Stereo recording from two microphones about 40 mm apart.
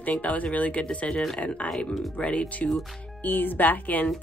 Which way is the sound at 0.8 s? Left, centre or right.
Left.